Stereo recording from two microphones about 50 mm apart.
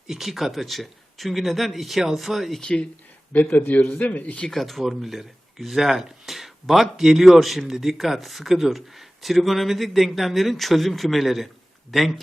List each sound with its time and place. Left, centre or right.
0.1 s speech: centre
2.6 s speech: centre
3.3 s speech: left
3.8 s a man's voice: centre
4.0 s speech: left
4.4 s speech: centre
4.6 s speech: centre